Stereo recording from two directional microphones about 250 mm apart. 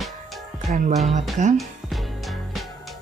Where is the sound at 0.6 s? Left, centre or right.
Right.